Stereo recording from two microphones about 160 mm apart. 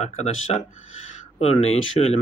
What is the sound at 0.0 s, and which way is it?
Speech, 45° left (ahead or behind).